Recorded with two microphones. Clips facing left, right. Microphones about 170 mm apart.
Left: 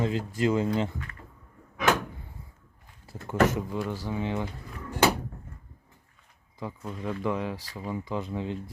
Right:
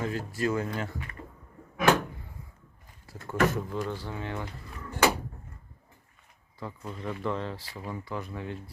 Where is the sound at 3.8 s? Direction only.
10° left (ahead or behind).